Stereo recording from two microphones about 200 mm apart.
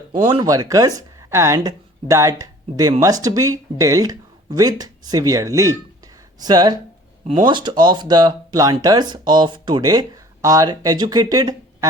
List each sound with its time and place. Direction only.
0.1 s speech: 20° right (ahead or behind)